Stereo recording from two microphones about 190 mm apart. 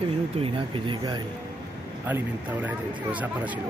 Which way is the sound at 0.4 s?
25° right (ahead or behind).